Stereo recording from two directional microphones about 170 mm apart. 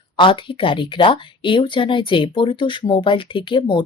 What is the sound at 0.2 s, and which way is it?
Speech, 30° left (ahead or behind).